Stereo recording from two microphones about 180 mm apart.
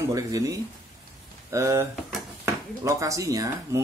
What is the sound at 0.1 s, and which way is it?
Speech, 20° right (ahead or behind).